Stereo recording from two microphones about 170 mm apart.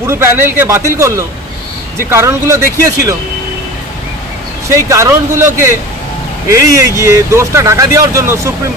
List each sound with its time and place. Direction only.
0.0 s speech: 15° right (ahead or behind)
4.6 s speech: 15° right (ahead or behind)